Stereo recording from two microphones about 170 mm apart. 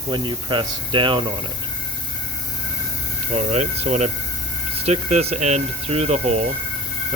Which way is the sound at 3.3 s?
40° right (ahead or behind).